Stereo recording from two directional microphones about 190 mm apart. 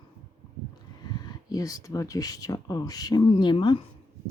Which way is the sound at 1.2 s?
20° left (ahead or behind).